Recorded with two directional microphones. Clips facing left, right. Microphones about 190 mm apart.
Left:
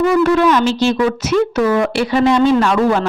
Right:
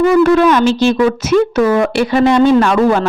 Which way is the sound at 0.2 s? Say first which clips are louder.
Right 3 dB; 50° right (ahead or behind).